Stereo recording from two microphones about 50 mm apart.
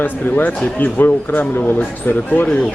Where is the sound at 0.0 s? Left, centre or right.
Left.